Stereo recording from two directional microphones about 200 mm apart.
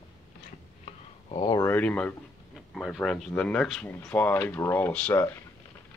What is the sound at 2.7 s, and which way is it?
Speech, centre (ahead or behind).